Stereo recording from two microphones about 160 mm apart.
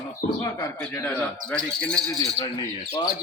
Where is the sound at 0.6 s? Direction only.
20° left (ahead or behind).